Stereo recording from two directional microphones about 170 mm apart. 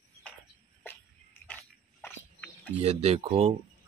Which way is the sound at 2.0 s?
10° left (ahead or behind).